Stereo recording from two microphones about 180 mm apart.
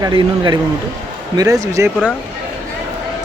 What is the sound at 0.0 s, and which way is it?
Speech, 25° right (ahead or behind).